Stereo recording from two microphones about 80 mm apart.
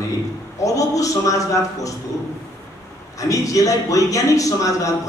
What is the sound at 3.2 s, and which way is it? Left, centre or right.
Speech, left.